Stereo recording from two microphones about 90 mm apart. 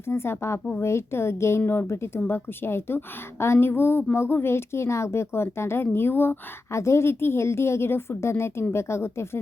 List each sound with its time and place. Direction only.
0.1 s a woman's voice: 30° left (ahead or behind)